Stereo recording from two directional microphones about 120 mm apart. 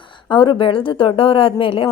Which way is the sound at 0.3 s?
45° left (ahead or behind).